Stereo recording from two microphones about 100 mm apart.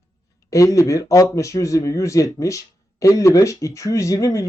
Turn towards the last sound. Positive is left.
turn(degrees=30)  # may be behind; listen again after turning